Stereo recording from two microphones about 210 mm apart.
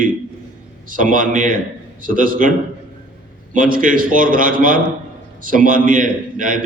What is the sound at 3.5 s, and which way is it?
A man's voice, 40° right (ahead or behind).